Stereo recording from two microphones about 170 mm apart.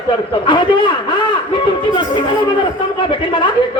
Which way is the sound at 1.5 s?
30° left (ahead or behind).